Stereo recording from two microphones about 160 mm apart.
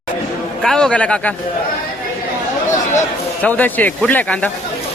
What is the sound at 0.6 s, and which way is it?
Speech, 5° left (ahead or behind).